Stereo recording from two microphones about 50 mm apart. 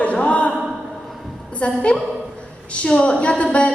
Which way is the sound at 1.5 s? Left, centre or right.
Left.